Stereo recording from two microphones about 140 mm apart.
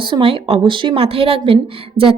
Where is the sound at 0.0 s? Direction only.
35° right (ahead or behind).